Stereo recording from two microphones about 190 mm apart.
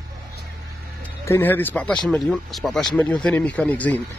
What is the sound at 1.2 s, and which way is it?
Speech, 10° left (ahead or behind).